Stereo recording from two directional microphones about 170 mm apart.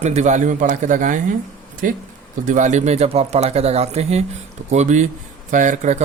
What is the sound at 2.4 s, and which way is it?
Speech, 45° right (ahead or behind).